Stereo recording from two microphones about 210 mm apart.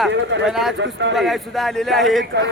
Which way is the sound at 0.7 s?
60° right (ahead or behind).